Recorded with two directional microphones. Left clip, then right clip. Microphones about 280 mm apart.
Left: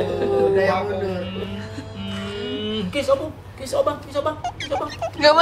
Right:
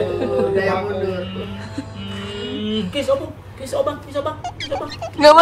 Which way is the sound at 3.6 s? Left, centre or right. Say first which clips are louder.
Even; centre.